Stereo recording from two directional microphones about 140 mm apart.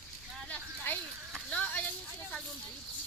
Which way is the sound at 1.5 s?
10° left (ahead or behind).